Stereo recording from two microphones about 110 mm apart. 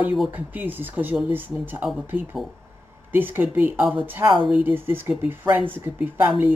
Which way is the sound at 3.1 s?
20° right (ahead or behind).